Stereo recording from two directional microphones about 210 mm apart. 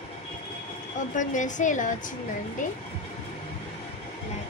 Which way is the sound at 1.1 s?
35° left (ahead or behind).